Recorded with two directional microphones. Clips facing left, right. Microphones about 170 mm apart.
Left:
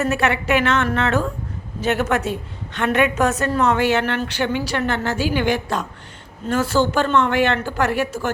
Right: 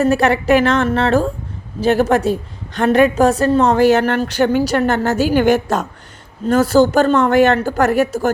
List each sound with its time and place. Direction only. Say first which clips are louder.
0.0 s a woman's voice: right 6 dB; 35° right (ahead or behind)